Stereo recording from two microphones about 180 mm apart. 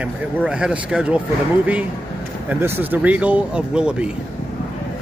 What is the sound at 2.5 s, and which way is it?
A man's voice, 10° right (ahead or behind).